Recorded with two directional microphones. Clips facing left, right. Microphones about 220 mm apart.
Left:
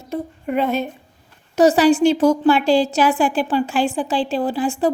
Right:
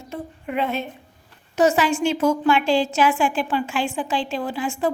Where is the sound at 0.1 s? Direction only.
40° left (ahead or behind).